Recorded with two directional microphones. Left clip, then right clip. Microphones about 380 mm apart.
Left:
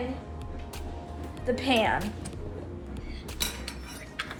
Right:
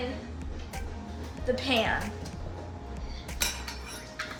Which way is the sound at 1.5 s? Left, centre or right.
Centre.